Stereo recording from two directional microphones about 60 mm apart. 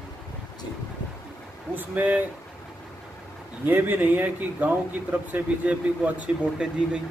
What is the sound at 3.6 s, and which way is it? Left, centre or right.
Speech, right.